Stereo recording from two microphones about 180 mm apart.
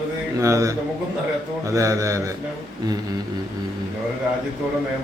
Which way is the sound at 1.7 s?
15° right (ahead or behind).